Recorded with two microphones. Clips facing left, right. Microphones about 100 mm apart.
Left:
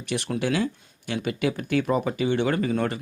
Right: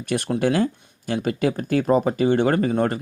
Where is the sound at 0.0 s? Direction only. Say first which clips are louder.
Right 5 dB; 45° right (ahead or behind).